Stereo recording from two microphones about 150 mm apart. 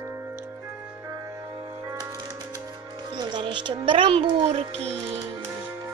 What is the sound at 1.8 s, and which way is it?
Music, 20° right (ahead or behind).